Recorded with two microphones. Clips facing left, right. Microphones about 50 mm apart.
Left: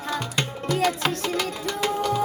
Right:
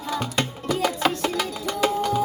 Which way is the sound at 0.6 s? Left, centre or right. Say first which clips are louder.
Even; centre.